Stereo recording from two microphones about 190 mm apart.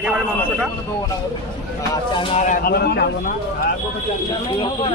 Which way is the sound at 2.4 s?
40° left (ahead or behind).